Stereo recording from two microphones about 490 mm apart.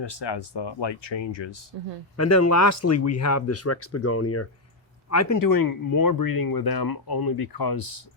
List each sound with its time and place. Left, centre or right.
0.0 s speech: left
2.1 s speech: left